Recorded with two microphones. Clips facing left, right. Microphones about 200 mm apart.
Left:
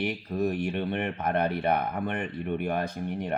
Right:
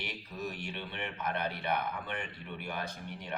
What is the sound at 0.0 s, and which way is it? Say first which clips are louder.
Speech: left 12 dB; 55° left (ahead or behind).